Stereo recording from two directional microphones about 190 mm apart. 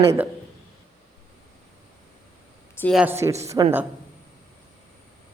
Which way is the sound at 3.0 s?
15° right (ahead or behind).